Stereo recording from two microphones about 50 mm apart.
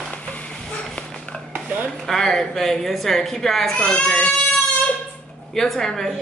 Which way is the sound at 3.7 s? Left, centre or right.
Left.